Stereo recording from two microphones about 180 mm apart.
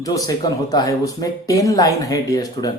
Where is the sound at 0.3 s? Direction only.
20° left (ahead or behind).